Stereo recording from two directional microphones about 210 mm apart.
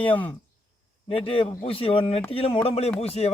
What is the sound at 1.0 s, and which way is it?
Speech, 25° left (ahead or behind).